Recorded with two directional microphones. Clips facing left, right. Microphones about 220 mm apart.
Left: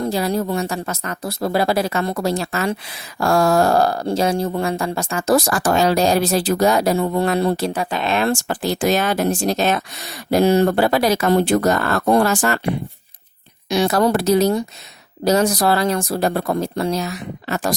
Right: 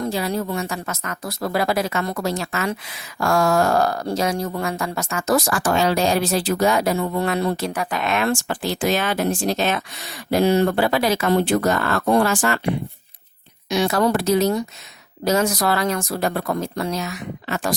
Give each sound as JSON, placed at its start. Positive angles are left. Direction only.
{"t": 0.0, "sound": "speech", "side_deg": 35}
{"t": 13.7, "sound": "speech", "side_deg": 35}